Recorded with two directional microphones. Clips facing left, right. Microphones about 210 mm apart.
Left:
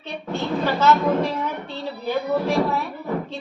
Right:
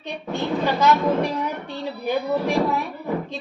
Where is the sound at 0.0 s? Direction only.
15° right (ahead or behind).